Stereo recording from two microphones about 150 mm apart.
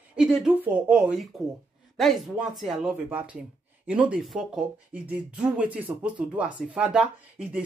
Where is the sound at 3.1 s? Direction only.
10° right (ahead or behind).